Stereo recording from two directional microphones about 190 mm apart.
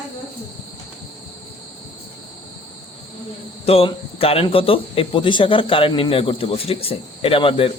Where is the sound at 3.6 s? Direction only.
30° left (ahead or behind).